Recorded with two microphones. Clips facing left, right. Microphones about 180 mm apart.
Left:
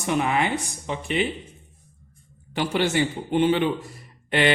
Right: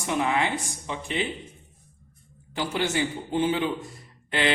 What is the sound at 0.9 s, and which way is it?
Speech, 60° left (ahead or behind).